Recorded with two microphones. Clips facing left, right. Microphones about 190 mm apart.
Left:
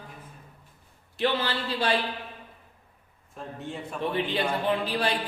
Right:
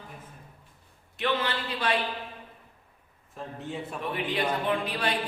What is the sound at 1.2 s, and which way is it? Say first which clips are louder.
Speech: left 2 dB; 30° left (ahead or behind).